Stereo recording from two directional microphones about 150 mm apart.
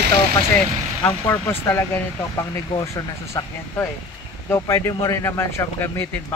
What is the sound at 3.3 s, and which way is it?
Speech, 20° left (ahead or behind).